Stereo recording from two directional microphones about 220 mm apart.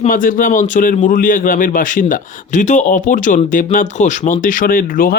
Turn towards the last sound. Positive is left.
turn(degrees=40)  # may be behind; listen again after turning